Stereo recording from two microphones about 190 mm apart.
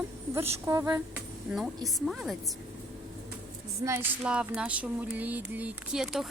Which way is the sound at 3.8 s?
15° right (ahead or behind).